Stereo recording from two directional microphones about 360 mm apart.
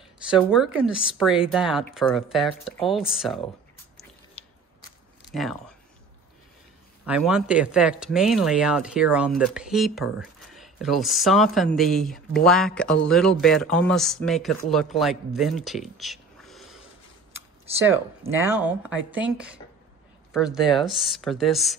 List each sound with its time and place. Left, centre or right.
0.3 s speech: centre
4.4 s biting: centre
5.3 s speech: centre
7.1 s speech: centre